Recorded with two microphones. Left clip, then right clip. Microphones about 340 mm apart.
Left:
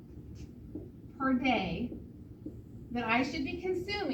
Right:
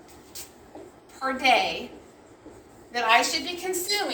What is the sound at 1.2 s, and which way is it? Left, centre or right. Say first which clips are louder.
Speech: right 9 dB; right.